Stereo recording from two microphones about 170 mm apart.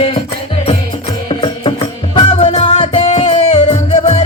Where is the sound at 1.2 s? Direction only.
30° left (ahead or behind).